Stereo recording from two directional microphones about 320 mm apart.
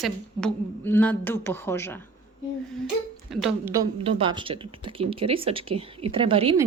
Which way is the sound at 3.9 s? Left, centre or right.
Centre.